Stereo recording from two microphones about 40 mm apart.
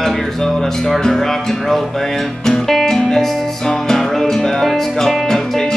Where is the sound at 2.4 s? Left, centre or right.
Centre.